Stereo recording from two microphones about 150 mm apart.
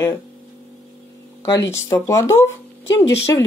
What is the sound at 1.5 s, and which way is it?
Speech, 20° left (ahead or behind).